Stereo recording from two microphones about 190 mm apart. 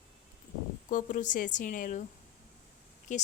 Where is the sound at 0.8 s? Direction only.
45° left (ahead or behind).